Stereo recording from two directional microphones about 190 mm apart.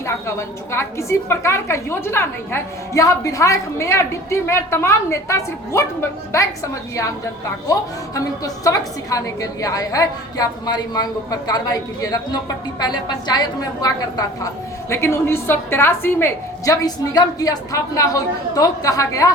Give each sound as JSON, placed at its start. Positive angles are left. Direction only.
{"t": 0.0, "sound": "a woman's voice", "side_deg": 15}
{"t": 7.7, "sound": "a woman's voice", "side_deg": 20}